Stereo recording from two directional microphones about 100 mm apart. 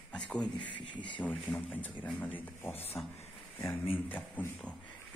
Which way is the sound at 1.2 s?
15° left (ahead or behind).